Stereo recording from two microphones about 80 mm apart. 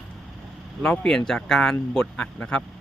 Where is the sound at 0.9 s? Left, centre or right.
Centre.